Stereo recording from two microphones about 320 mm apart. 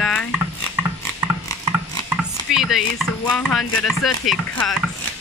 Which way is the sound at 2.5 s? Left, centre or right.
Centre.